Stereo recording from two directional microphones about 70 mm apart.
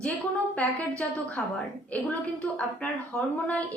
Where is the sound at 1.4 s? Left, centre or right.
Centre.